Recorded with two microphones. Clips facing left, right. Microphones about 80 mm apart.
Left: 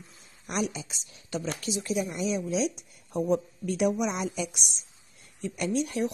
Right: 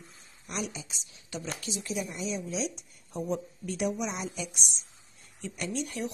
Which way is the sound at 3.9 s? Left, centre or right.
Left.